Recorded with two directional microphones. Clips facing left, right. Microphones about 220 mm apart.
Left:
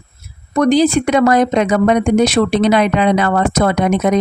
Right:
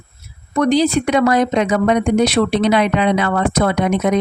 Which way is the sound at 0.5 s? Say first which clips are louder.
Left 3 dB; 45° left (ahead or behind).